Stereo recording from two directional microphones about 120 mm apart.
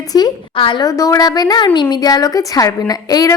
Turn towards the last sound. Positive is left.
turn(degrees=30)  # may be behind; listen again after turning